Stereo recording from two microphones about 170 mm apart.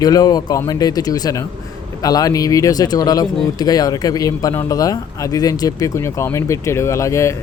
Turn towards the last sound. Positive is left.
turn(degrees=15)  # may be behind; listen again after turning